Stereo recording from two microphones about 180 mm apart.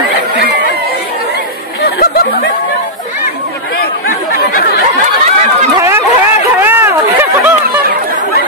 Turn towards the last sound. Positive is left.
turn(degrees=-10)  # may be behind; listen again after turning